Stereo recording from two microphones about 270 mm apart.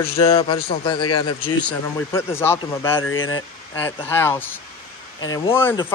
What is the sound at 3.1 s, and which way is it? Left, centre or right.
Speech, left.